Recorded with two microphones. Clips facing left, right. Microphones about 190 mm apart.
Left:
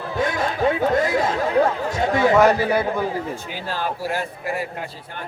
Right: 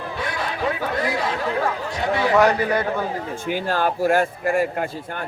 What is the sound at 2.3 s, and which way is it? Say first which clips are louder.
Speech: even; 5° left (ahead or behind).